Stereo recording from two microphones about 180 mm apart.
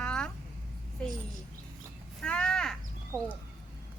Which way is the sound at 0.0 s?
5° left (ahead or behind).